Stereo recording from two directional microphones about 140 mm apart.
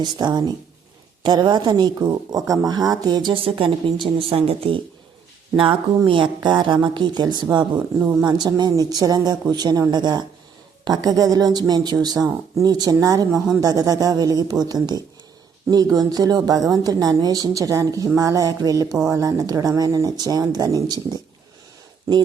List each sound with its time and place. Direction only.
0.0 s speech: 30° right (ahead or behind)
6.1 s speech: 35° right (ahead or behind)
7.9 s speech: 15° right (ahead or behind)
8.2 s speech: 30° right (ahead or behind)